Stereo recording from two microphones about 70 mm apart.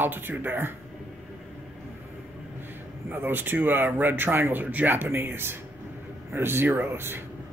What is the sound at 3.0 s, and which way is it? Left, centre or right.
Speech, right.